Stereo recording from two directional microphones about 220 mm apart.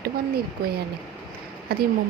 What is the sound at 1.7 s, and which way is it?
Speech, 45° right (ahead or behind).